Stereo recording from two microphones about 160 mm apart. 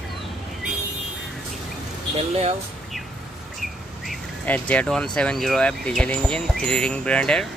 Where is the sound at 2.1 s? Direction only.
40° right (ahead or behind).